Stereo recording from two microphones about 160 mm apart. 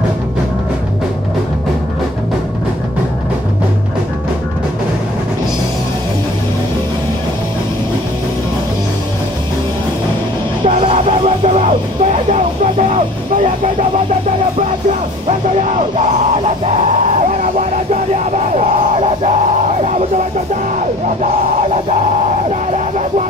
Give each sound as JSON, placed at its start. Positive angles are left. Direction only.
{"t": 10.9, "sound": "music", "side_deg": -50}
{"t": 16.0, "sound": "music", "side_deg": -45}
{"t": 18.1, "sound": "music", "side_deg": -45}
{"t": 22.7, "sound": "a sound", "side_deg": -45}